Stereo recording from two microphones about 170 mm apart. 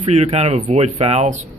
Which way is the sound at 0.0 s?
40° right (ahead or behind).